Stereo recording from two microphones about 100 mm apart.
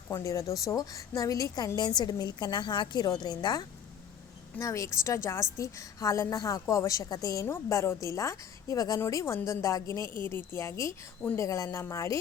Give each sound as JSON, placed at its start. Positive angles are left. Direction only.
{"t": 0.1, "sound": "a woman's voice", "side_deg": 30}
{"t": 4.6, "sound": "a woman's voice", "side_deg": 30}
{"t": 7.4, "sound": "a woman's voice", "side_deg": 30}